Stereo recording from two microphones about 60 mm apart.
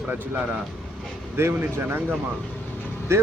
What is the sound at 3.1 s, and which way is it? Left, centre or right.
Speech, right.